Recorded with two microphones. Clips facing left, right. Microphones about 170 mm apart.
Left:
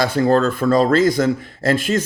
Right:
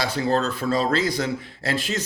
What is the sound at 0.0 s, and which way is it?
Speech, 50° left (ahead or behind).